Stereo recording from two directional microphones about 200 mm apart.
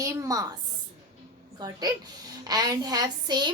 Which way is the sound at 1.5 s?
20° right (ahead or behind).